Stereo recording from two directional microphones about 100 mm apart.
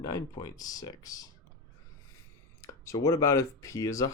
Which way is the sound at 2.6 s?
35° left (ahead or behind).